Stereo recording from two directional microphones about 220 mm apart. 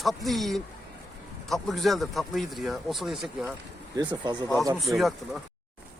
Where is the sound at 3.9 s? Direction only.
20° right (ahead or behind).